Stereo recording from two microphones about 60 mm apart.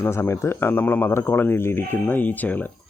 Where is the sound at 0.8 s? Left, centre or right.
Left.